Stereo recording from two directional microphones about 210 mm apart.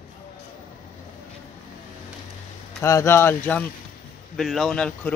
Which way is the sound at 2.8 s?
15° left (ahead or behind).